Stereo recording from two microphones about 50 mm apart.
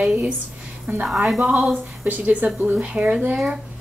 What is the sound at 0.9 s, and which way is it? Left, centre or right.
A woman's voice, right.